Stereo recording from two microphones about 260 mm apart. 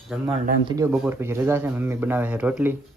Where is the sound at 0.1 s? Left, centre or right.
Centre.